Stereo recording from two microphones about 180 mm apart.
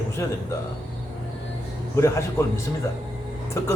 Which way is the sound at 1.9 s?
15° left (ahead or behind).